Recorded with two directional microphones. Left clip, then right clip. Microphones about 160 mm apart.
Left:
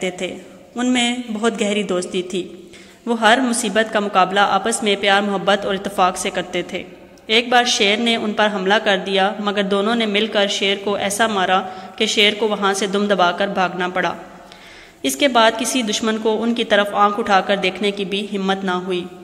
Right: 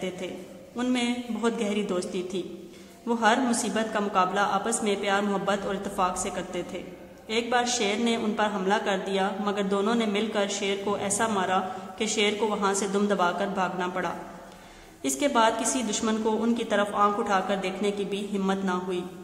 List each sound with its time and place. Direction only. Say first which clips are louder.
0.2 s speech: left 9 dB; 25° left (ahead or behind)